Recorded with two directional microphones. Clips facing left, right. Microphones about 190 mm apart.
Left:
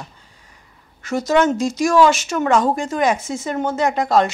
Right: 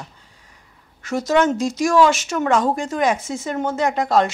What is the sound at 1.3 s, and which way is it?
Speech, 10° left (ahead or behind).